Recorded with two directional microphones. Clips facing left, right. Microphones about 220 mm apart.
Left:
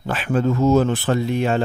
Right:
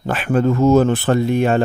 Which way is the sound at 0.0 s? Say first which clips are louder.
Right 3 dB; 55° right (ahead or behind).